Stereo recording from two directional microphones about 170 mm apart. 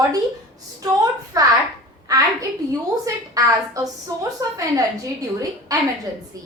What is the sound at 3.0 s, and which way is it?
A woman's voice, 20° right (ahead or behind).